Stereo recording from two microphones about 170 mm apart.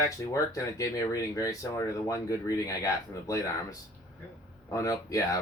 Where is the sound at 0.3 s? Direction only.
20° left (ahead or behind).